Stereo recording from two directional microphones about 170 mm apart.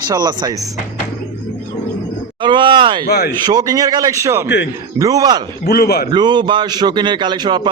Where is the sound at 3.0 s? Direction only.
70° left (ahead or behind).